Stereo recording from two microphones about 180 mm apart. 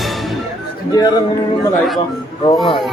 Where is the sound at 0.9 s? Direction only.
20° left (ahead or behind).